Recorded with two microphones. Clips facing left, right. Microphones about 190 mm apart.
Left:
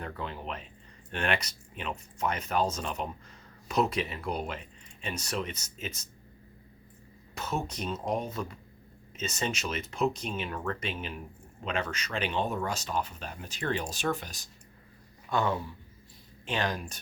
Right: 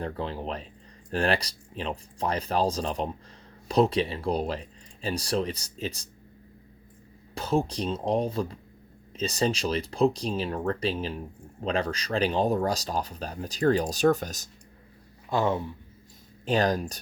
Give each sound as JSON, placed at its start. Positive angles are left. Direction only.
{"t": 0.0, "sound": "speech", "side_deg": -30}
{"t": 7.3, "sound": "speech", "side_deg": -30}
{"t": 15.3, "sound": "speech", "side_deg": -25}
{"t": 16.5, "sound": "speech", "side_deg": -40}